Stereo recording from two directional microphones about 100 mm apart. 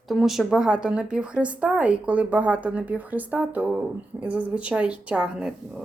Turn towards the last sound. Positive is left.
turn(degrees=-5)  # may be behind; listen again after turning